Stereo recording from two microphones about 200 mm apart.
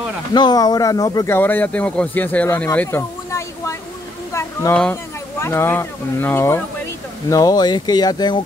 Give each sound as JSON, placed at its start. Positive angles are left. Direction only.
{"t": 0.3, "sound": "speech", "side_deg": 20}
{"t": 4.3, "sound": "a sound", "side_deg": 15}
{"t": 5.4, "sound": "speech", "side_deg": 10}